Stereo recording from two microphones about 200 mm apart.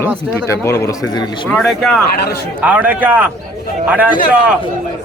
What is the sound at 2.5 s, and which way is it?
A man's voice, 5° right (ahead or behind).